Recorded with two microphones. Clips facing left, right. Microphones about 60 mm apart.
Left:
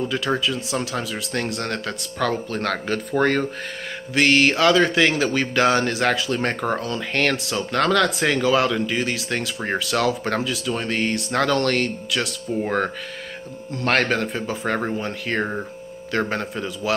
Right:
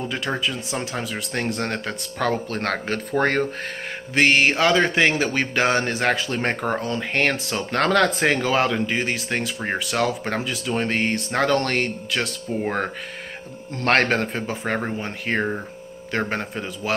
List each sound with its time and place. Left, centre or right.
0.1 s a man's voice: right
10.4 s a man's voice: right
13.7 s a man's voice: right